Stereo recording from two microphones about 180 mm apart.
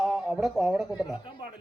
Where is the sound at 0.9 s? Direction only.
25° left (ahead or behind).